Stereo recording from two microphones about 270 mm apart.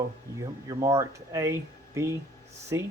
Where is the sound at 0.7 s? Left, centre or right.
Centre.